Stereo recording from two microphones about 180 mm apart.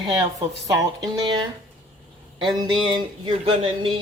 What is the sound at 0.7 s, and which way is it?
Speech, 20° right (ahead or behind).